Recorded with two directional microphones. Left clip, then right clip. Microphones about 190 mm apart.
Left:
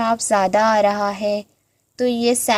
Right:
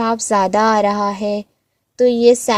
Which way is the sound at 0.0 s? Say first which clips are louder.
Right 1 dB; 45° right (ahead or behind).